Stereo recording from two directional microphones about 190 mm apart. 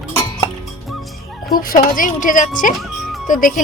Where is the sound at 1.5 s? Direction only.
50° left (ahead or behind).